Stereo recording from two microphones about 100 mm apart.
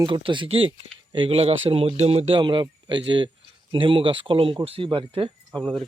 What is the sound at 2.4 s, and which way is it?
Speech, 50° right (ahead or behind).